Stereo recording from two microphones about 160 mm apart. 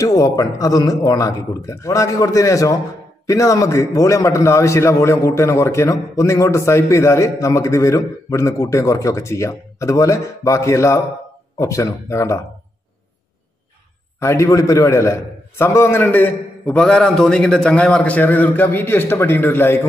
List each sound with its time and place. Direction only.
0.0 s a man's voice: 20° left (ahead or behind)
14.2 s a man's voice: 15° left (ahead or behind)